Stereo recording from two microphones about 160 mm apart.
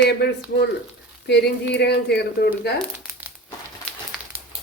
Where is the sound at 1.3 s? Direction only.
90° left.